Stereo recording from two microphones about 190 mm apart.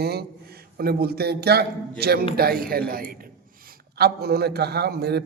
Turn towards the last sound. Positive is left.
turn(degrees=-60)  # may be behind; listen again after turning